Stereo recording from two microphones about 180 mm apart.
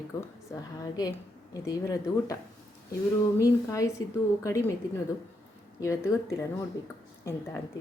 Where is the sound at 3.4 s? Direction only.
15° left (ahead or behind).